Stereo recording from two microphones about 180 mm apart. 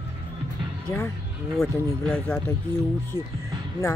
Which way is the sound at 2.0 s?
5° left (ahead or behind).